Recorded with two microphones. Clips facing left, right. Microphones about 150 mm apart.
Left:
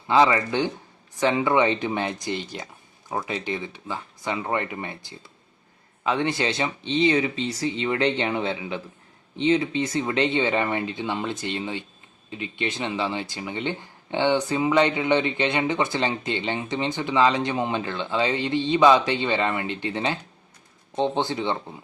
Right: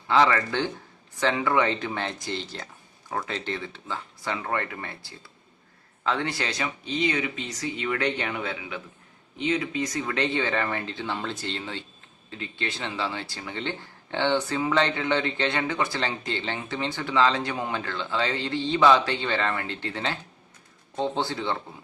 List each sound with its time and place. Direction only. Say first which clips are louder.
0.1 s speech: left 2 dB; 15° left (ahead or behind)